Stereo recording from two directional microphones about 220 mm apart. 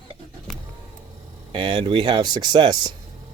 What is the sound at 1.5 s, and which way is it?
Speech, 20° right (ahead or behind).